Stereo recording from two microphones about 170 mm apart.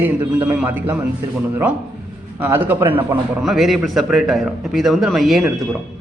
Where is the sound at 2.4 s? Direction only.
10° right (ahead or behind).